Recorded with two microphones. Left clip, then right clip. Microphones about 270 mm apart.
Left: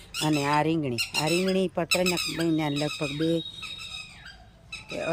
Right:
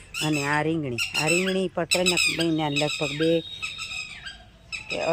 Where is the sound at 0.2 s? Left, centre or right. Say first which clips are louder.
Even; centre.